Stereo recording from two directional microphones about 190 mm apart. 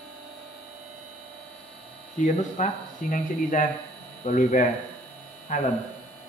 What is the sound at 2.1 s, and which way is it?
Speech, 40° left (ahead or behind).